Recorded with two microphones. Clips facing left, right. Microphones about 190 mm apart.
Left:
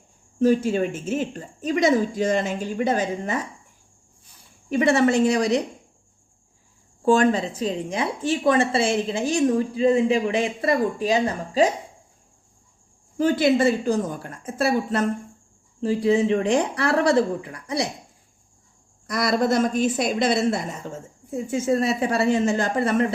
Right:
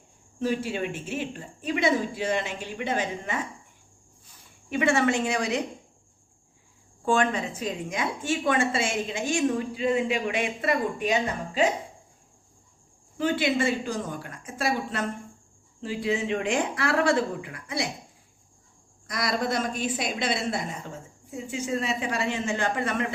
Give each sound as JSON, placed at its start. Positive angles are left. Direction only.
{"t": 0.3, "sound": "a woman's voice", "side_deg": 45}
{"t": 4.7, "sound": "a woman's voice", "side_deg": 40}
{"t": 7.0, "sound": "a woman's voice", "side_deg": 40}
{"t": 13.1, "sound": "a woman's voice", "side_deg": 40}
{"t": 19.1, "sound": "a woman's voice", "side_deg": 45}